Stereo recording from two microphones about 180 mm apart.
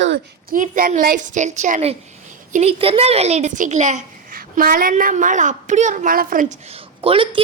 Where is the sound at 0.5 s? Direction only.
50° right (ahead or behind).